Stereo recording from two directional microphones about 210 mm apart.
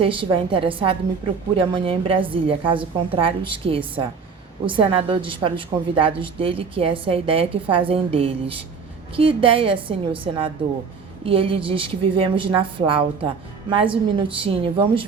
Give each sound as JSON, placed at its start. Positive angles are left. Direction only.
{"t": 0.0, "sound": "a woman's voice", "side_deg": -25}